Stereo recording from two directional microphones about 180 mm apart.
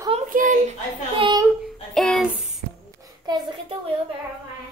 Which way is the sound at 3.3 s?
30° right (ahead or behind).